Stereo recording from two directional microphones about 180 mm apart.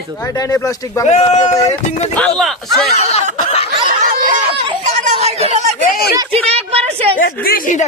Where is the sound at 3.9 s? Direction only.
45° right (ahead or behind).